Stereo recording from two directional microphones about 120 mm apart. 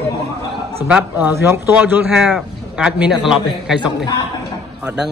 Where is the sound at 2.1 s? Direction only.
5° right (ahead or behind).